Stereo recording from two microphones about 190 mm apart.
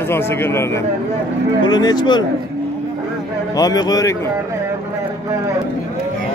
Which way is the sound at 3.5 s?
20° left (ahead or behind).